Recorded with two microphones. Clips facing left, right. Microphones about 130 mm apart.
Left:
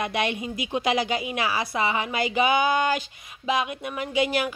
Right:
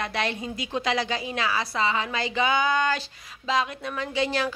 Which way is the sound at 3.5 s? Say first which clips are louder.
Even; 20° left (ahead or behind).